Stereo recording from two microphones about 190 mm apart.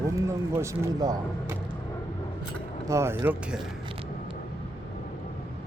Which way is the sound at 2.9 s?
15° right (ahead or behind).